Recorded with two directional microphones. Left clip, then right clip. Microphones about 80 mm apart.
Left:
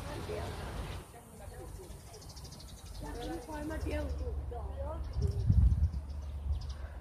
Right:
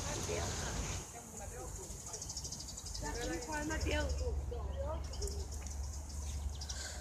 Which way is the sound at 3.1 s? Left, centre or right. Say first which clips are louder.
Right 1 dB; centre.